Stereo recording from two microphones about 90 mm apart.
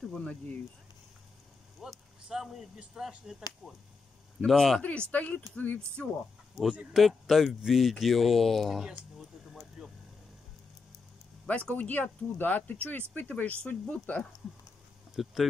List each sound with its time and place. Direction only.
0.1 s speech: 10° left (ahead or behind)
1.8 s speech: 5° right (ahead or behind)
4.5 s speech: 5° left (ahead or behind)
5.1 s speech: 15° left (ahead or behind)
6.6 s speech: centre (ahead or behind)
11.4 s speech: 15° left (ahead or behind)
15.2 s speech: 5° right (ahead or behind)